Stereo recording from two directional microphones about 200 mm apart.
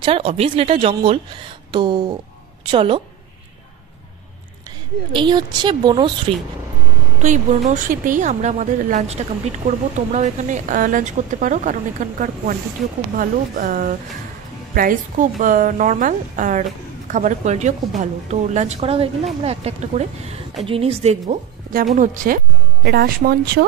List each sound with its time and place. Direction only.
0.0 s speech: 30° right (ahead or behind)
5.1 s speech: 25° right (ahead or behind)
7.2 s speech: 35° right (ahead or behind)
22.8 s speech: 55° right (ahead or behind)